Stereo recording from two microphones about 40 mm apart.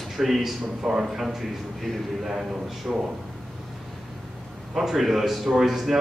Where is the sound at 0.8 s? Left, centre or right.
Centre.